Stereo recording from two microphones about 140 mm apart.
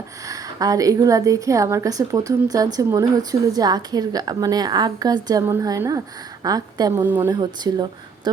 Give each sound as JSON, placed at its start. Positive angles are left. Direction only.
{"t": 0.3, "sound": "a woman's voice", "side_deg": -25}
{"t": 7.0, "sound": "speech", "side_deg": -15}
{"t": 7.3, "sound": "speech", "side_deg": -30}